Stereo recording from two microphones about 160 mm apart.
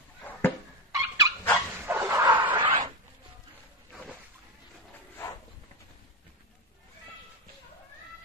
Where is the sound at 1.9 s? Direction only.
15° right (ahead or behind).